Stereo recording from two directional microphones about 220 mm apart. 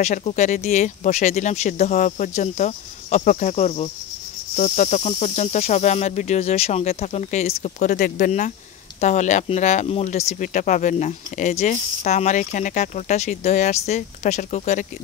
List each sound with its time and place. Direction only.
0.0 s speech: 30° left (ahead or behind)